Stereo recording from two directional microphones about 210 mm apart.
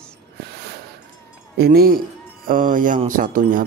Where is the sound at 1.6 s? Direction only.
45° right (ahead or behind).